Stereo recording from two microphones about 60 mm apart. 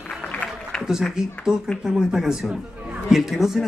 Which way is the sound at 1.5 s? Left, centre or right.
Centre.